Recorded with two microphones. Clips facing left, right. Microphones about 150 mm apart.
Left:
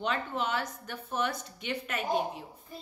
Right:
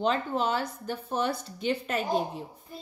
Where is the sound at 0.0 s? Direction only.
35° right (ahead or behind).